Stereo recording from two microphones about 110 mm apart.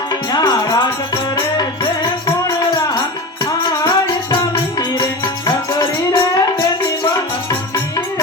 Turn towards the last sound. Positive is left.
turn(degrees=30)  # may be behind; listen again after turning